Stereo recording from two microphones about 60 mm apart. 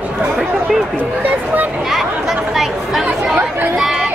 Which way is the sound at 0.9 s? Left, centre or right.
Right.